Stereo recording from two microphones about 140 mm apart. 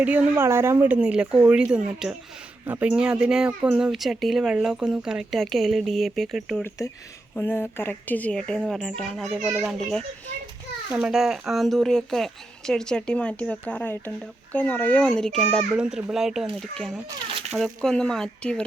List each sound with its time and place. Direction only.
0.0 s speech: 10° right (ahead or behind)
6.6 s speech: 20° left (ahead or behind); by 9.7 s 5° right (ahead or behind)
10.9 s speech: 5° right (ahead or behind)
15.5 s speech: 5° right (ahead or behind)